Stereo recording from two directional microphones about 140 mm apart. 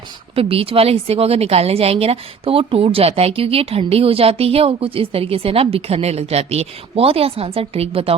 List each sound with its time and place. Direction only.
0.3 s a woman's voice: 45° right (ahead or behind)